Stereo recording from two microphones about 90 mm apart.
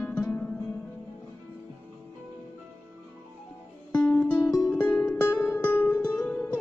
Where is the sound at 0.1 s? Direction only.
15° left (ahead or behind).